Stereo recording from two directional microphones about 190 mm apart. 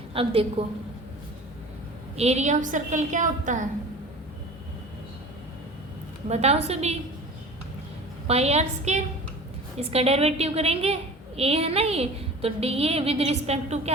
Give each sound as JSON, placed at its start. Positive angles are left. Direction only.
{"t": 0.1, "sound": "a woman's voice", "side_deg": -30}
{"t": 2.1, "sound": "a woman's voice", "side_deg": -35}
{"t": 6.2, "sound": "a woman's voice", "side_deg": -35}
{"t": 8.3, "sound": "a woman's voice", "side_deg": -35}